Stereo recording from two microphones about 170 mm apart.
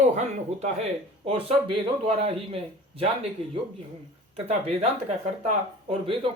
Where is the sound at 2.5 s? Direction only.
35° right (ahead or behind).